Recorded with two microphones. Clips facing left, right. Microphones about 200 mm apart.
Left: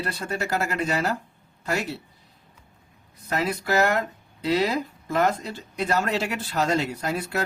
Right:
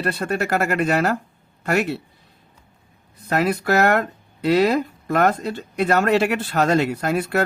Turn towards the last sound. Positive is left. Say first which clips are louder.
# right 6 dB
turn(degrees=-60)  # may be behind; listen again after turning